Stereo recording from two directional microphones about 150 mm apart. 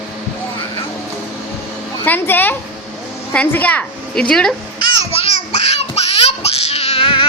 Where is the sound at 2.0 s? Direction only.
15° left (ahead or behind).